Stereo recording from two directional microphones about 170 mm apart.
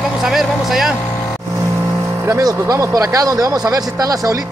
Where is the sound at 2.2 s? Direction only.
15° right (ahead or behind).